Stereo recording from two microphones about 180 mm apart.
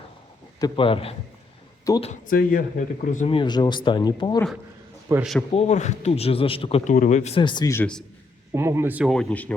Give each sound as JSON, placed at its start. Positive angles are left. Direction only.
{"t": 0.6, "sound": "speech", "side_deg": 30}
{"t": 1.9, "sound": "speech", "side_deg": 20}
{"t": 2.2, "sound": "speech", "side_deg": 50}
{"t": 3.2, "sound": "speech", "side_deg": 25}
{"t": 5.2, "sound": "a man's voice", "side_deg": 0}
{"t": 5.5, "sound": "speech", "side_deg": 35}
{"t": 8.5, "sound": "speech", "side_deg": -15}
{"t": 9.0, "sound": "speech", "side_deg": 5}